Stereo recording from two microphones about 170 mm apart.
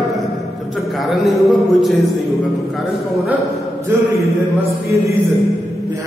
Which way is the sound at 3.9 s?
15° right (ahead or behind).